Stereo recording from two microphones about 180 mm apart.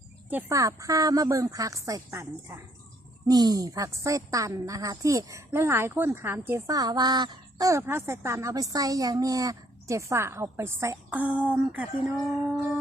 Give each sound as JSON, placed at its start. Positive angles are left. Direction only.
{"t": 0.3, "sound": "a woman's voice", "side_deg": -15}